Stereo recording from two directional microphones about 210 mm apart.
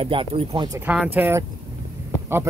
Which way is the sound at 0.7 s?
5° right (ahead or behind).